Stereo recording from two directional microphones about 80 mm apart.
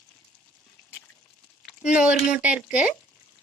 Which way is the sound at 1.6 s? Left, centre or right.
Centre.